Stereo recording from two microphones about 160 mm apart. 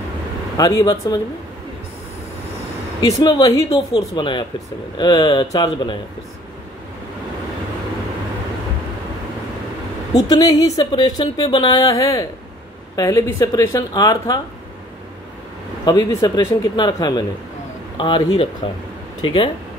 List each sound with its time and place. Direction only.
0.6 s speech: 20° left (ahead or behind)
3.0 s speech: 30° left (ahead or behind)
10.2 s speech: 20° left (ahead or behind)
15.8 s speech: 25° left (ahead or behind)